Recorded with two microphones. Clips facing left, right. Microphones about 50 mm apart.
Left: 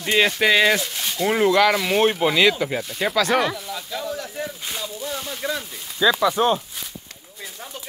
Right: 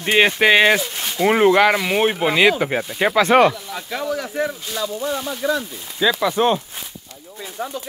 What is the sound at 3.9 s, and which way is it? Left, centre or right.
Speech, right.